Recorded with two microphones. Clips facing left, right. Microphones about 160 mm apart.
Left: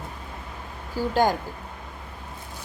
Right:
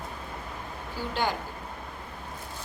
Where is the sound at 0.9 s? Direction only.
45° left (ahead or behind).